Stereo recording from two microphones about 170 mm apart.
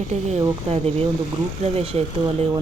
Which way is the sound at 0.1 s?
40° right (ahead or behind).